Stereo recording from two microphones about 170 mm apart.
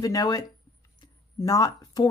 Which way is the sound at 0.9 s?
20° left (ahead or behind).